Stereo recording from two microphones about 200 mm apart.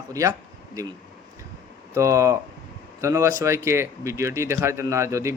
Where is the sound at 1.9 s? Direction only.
15° right (ahead or behind).